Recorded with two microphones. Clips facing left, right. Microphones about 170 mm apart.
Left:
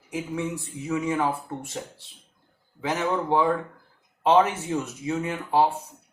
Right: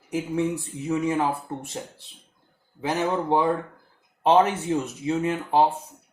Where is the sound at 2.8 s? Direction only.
25° right (ahead or behind).